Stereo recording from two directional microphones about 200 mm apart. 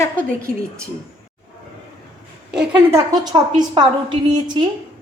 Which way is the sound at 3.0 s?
20° right (ahead or behind).